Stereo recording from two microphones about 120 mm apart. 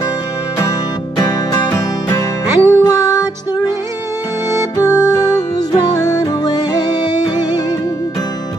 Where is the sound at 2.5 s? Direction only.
20° right (ahead or behind).